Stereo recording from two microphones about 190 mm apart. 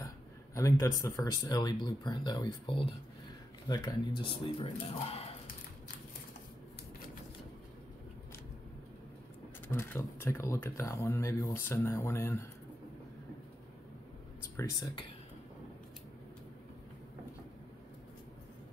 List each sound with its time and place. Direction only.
0.6 s speech: 15° left (ahead or behind)
9.7 s speech: 10° left (ahead or behind)
14.6 s speech: 20° left (ahead or behind)